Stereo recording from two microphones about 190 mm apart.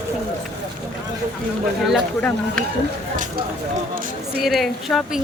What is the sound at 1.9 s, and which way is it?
Speech, 5° left (ahead or behind).